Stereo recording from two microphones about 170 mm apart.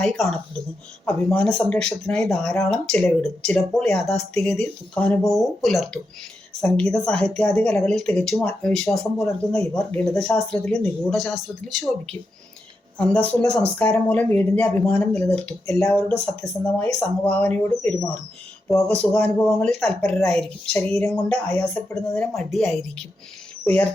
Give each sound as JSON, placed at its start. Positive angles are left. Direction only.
{"t": 0.0, "sound": "speech", "side_deg": 0}
{"t": 13.0, "sound": "speech", "side_deg": 5}